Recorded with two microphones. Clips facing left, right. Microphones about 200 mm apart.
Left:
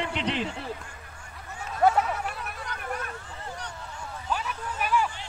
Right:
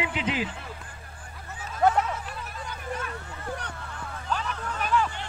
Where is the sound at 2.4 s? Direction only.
65° left (ahead or behind).